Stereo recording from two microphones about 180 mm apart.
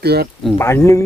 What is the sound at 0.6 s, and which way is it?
Speech, 15° left (ahead or behind).